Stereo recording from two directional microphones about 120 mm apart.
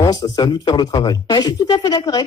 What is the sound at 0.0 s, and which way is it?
Speech, 30° left (ahead or behind).